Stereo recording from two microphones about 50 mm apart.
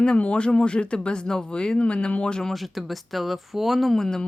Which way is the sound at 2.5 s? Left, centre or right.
Centre.